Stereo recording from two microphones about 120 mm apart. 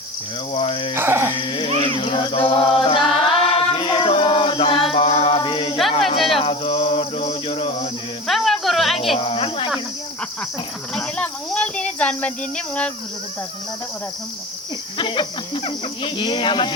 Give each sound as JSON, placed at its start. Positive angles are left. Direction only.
{"t": 0.5, "sound": "speech", "side_deg": 50}
{"t": 0.9, "sound": "speech", "side_deg": -20}
{"t": 1.5, "sound": "a sound", "side_deg": 45}
{"t": 6.1, "sound": "cricket", "side_deg": 0}
{"t": 6.4, "sound": "cricket", "side_deg": 45}
{"t": 8.3, "sound": "snake", "side_deg": 0}
{"t": 9.1, "sound": "cricket", "side_deg": 50}
{"t": 10.9, "sound": "speech", "side_deg": 10}
{"t": 14.9, "sound": "speech", "side_deg": 40}